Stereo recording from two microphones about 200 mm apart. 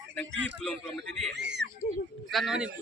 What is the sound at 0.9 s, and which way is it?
Speech, 60° right (ahead or behind).